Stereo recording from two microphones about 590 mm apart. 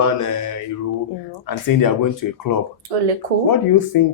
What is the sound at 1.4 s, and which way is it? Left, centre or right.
Speech, left.